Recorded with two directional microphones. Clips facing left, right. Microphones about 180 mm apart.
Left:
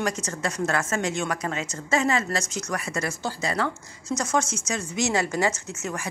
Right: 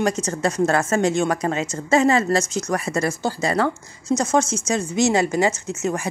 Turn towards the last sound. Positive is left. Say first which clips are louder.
# right 6 dB
turn(degrees=-20)  # may be behind; listen again after turning